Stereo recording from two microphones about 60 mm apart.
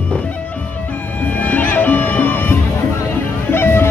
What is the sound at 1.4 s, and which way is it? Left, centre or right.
Music, left.